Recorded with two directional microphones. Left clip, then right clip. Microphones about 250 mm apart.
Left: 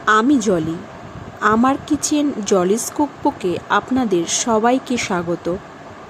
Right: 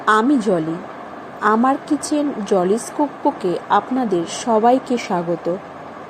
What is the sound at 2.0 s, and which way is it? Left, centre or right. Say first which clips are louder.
Speech: left 2 dB; centre.